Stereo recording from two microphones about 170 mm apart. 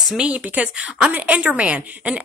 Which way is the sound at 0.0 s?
5° right (ahead or behind).